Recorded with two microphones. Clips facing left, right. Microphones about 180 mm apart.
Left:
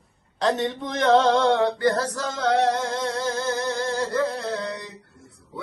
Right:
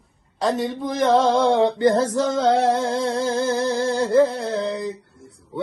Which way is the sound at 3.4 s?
35° right (ahead or behind).